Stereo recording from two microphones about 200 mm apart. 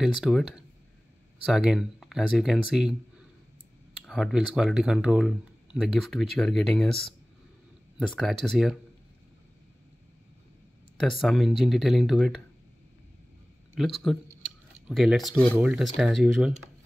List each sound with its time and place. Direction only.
0.0 s speech: centre (ahead or behind)
11.0 s speech: centre (ahead or behind)
13.7 s speech: centre (ahead or behind)